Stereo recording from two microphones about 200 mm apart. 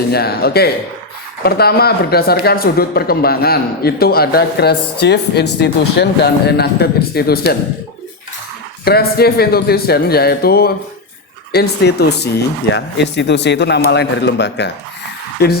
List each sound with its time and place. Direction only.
0.1 s speech: 50° left (ahead or behind)
8.8 s speech: 50° left (ahead or behind)